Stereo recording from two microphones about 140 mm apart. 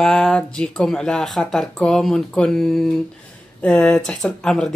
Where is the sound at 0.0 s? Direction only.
5° left (ahead or behind).